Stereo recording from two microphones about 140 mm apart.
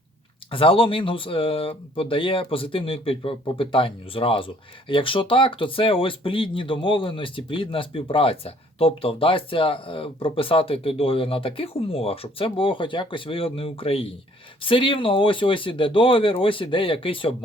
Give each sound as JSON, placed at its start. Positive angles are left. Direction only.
{"t": 0.5, "sound": "speech", "side_deg": 40}